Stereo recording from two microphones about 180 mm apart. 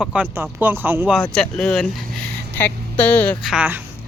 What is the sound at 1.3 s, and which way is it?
Speech, 5° left (ahead or behind).